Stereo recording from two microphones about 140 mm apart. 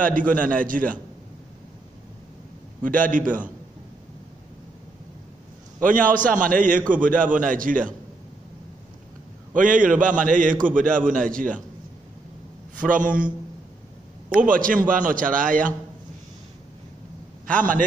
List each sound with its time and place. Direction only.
0.0 s a man's voice: 75° right (ahead or behind)
2.8 s a man's voice: 70° right (ahead or behind)
5.8 s a man's voice: 75° right (ahead or behind)
9.5 s a man's voice: 70° right (ahead or behind)
14.3 s a man's voice: 75° right (ahead or behind)
17.5 s a man's voice: 70° right (ahead or behind)